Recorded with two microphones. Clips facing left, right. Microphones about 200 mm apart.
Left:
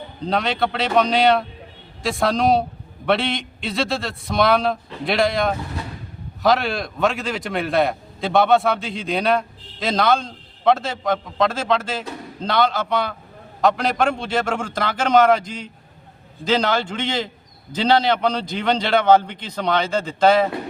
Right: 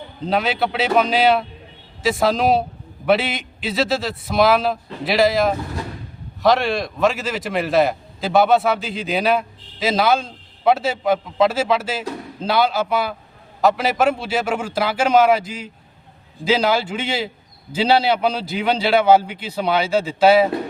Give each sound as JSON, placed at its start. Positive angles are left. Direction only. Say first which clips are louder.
{"t": 0.3, "sound": "a man's voice", "louder": "right 1 dB", "side_deg": -5}